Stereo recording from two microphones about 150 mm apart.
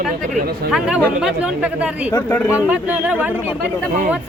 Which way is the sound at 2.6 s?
10° right (ahead or behind).